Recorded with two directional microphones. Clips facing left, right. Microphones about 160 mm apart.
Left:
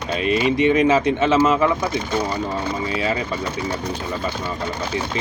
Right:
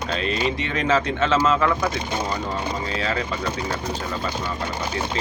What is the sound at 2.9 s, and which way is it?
Speech, 15° left (ahead or behind).